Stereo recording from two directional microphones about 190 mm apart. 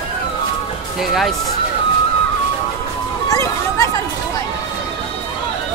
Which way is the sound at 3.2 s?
15° left (ahead or behind).